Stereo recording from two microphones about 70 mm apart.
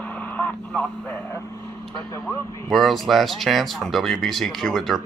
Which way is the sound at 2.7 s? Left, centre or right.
Centre.